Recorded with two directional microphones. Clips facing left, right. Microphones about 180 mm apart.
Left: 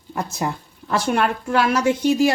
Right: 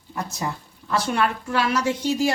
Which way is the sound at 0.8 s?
55° left (ahead or behind).